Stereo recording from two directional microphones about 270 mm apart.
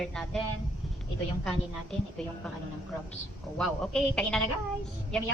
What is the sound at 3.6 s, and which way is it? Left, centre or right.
Speech, centre.